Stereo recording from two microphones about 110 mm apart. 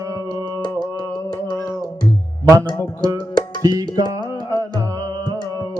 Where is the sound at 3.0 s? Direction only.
35° right (ahead or behind).